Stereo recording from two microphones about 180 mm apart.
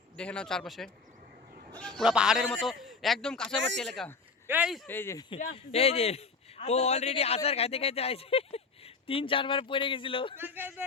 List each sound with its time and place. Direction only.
0.2 s a man's voice: 5° left (ahead or behind)
3.5 s speech: 90° right
3.8 s a man's voice: 5° left (ahead or behind)
4.4 s a man's voice: 5° right (ahead or behind)
4.9 s speech: 15° left (ahead or behind)
5.4 s a man's voice: 35° left (ahead or behind)
10.3 s a man's voice: 10° right (ahead or behind)